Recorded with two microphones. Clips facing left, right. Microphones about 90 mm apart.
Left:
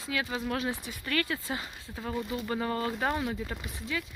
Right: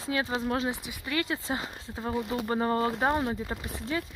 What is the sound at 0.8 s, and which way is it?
Speech, 20° right (ahead or behind).